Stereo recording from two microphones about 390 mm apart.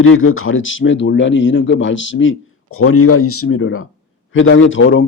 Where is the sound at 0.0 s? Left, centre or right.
Left.